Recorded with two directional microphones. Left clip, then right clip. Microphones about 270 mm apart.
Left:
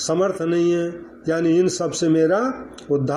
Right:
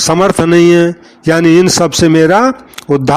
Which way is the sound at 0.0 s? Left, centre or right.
Right.